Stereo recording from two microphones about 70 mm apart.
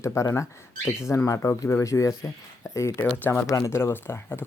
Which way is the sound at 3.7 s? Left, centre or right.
Left.